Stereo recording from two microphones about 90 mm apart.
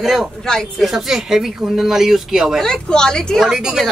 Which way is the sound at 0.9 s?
5° right (ahead or behind).